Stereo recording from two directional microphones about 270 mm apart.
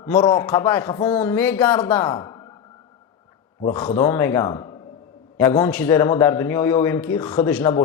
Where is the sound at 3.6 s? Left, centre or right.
Centre.